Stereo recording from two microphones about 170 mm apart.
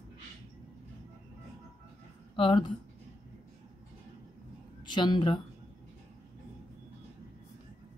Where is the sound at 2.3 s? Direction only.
30° left (ahead or behind).